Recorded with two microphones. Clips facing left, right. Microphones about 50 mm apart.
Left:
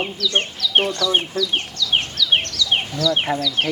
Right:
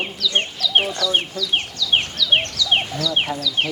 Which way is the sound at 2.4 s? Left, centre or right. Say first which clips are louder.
Right 1 dB; right.